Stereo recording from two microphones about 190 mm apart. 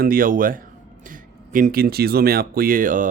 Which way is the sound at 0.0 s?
50° right (ahead or behind).